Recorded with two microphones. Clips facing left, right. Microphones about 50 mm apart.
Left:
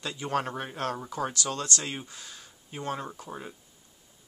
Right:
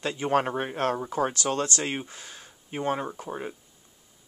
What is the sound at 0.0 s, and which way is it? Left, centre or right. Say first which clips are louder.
Speech: right 5 dB; right.